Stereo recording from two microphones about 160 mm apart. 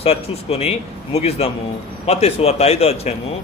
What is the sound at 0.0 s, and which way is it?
A man's voice, 40° left (ahead or behind).